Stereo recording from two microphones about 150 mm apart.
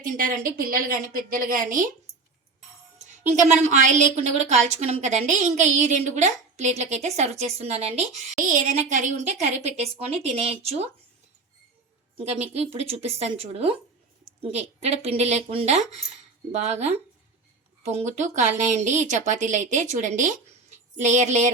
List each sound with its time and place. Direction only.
0.0 s a woman's voice: 65° right (ahead or behind)
3.7 s a woman's voice: 55° right (ahead or behind)
12.1 s a woman's voice: 45° right (ahead or behind)